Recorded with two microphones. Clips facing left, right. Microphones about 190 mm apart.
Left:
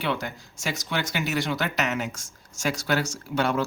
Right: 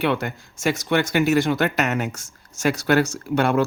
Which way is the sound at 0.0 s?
55° right (ahead or behind).